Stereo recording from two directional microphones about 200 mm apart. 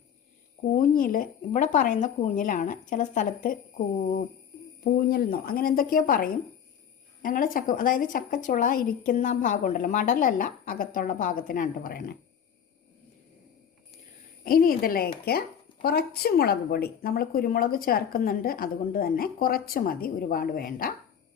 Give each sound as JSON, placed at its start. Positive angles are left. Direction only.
{"t": 0.6, "sound": "speech", "side_deg": 40}
{"t": 4.8, "sound": "speech", "side_deg": 50}
{"t": 14.4, "sound": "speech", "side_deg": 45}